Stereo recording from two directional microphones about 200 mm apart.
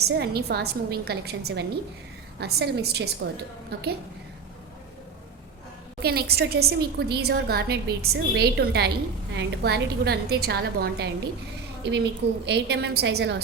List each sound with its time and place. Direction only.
0.0 s a woman's voice: 55° right (ahead or behind)
6.0 s a woman's voice: 50° right (ahead or behind)